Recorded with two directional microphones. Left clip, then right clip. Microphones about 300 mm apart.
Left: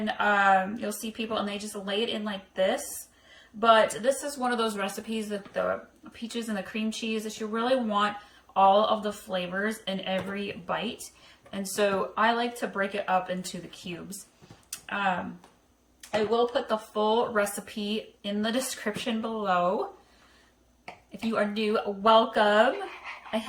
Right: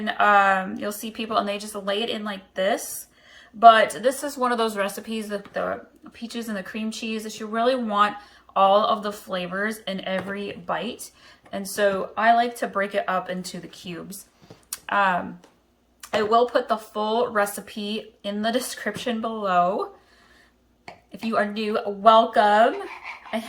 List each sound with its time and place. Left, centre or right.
0.0 s speech: centre
14.7 s a sound: centre
16.0 s speech: centre
21.2 s speech: centre